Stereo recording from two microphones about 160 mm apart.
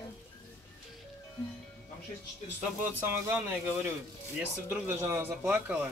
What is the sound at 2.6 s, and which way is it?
Speech, 10° right (ahead or behind).